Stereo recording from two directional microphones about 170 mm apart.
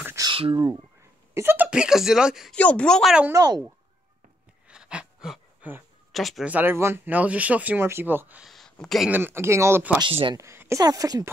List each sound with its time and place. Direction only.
0.0 s a sound: 15° right (ahead or behind)
0.3 s speech: 30° right (ahead or behind)
1.3 s speech: 15° right (ahead or behind)
2.5 s speech: 5° left (ahead or behind)
3.3 s a woman's voice: 20° right (ahead or behind)
4.6 s a sound: 5° right (ahead or behind)
6.1 s speech: centre (ahead or behind)
9.1 s speech: 15° right (ahead or behind)
9.9 s a woman's voice: 30° right (ahead or behind)
10.4 s a woman's voice: 15° right (ahead or behind)